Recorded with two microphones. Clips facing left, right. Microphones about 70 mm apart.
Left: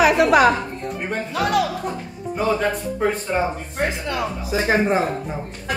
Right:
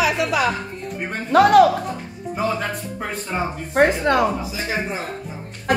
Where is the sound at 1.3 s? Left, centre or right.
Right.